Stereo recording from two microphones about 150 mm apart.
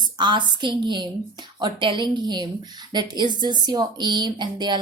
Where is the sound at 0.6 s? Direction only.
30° right (ahead or behind).